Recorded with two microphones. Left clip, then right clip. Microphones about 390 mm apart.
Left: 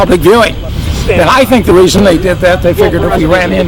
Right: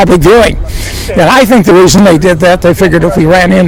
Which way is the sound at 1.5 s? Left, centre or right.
Right.